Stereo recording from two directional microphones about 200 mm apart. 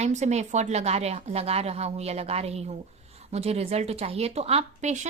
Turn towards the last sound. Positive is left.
turn(degrees=-35)  # may be behind; listen again after turning